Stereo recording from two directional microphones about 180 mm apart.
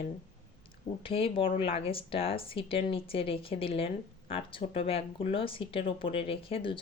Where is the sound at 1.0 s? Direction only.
30° left (ahead or behind).